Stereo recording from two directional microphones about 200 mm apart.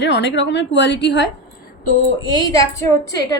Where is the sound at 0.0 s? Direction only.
60° left (ahead or behind).